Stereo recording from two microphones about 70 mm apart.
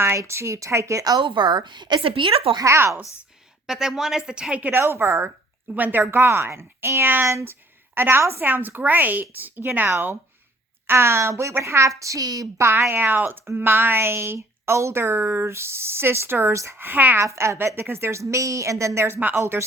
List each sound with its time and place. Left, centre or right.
0.2 s a woman's voice: right
1.0 s speech: right
2.6 s speech: right
3.0 s a woman's voice: left
3.7 s a woman's voice: centre
4.8 s speech: right
5.7 s speech: right
6.0 s speech: right
7.3 s a woman's voice: right
7.9 s a woman's voice: right
12.5 s speech: right
17.2 s speech: right
19.4 s speech: right